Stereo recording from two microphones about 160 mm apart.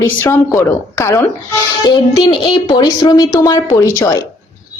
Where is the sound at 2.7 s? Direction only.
30° left (ahead or behind).